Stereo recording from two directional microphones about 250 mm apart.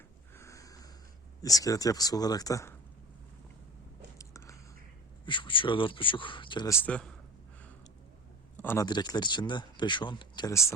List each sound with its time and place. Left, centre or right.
0.3 s snort: centre
1.4 s speech: centre
4.2 s a sound: centre
5.2 s speech: centre
6.8 s a man's voice: centre
8.6 s speech: centre